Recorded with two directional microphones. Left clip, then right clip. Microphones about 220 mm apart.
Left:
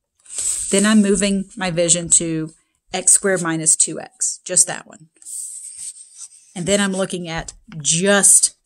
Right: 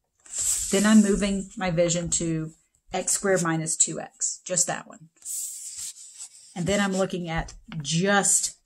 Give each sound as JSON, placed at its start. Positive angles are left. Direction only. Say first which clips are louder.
{"t": 0.7, "sound": "speech", "louder": "left 5 dB", "side_deg": 50}
{"t": 6.5, "sound": "speech", "louder": "left 6 dB", "side_deg": 50}